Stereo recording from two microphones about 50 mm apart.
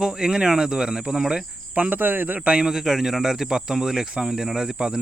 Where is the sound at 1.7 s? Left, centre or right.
Right.